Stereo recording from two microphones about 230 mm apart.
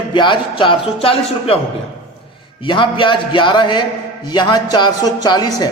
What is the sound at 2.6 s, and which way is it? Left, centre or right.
A man's voice, left.